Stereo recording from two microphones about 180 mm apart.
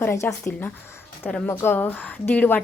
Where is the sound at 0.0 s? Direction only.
15° left (ahead or behind).